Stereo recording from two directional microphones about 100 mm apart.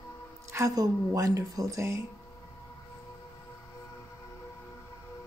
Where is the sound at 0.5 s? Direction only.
35° right (ahead or behind).